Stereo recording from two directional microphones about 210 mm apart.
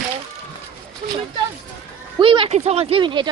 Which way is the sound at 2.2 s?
25° right (ahead or behind).